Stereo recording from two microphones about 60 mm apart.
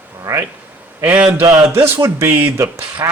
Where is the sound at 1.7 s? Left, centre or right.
Right.